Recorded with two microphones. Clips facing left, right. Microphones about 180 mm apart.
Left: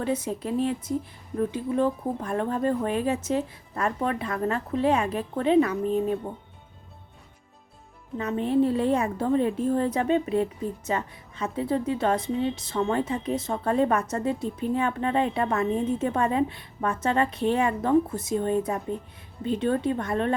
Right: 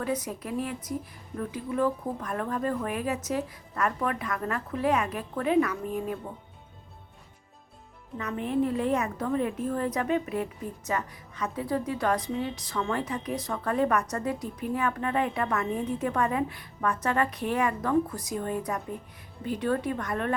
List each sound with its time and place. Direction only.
0.0 s a woman's voice: 25° left (ahead or behind)
8.2 s a woman's voice: 30° left (ahead or behind)